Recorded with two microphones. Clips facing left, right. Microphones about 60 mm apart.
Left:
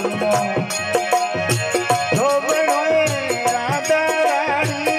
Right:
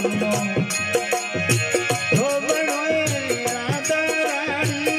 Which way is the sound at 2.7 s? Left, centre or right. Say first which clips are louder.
Left 5 dB; left.